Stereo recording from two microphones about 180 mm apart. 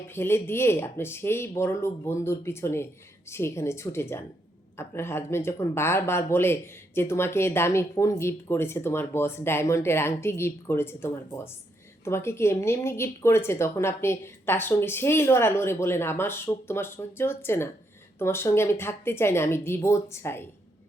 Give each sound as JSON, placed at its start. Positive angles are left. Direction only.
{"t": 0.1, "sound": "speech", "side_deg": 15}